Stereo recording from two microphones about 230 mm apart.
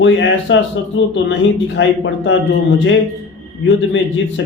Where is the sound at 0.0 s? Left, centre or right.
Left.